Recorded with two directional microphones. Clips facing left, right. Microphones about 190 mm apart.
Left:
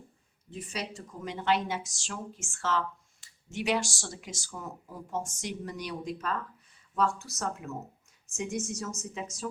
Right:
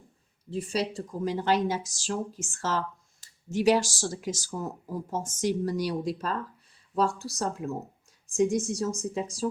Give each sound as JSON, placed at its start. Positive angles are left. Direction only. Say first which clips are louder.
{"t": 0.5, "sound": "speech", "louder": "right 8 dB", "side_deg": -35}